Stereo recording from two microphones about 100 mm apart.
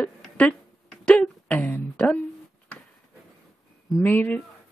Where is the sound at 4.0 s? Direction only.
20° left (ahead or behind).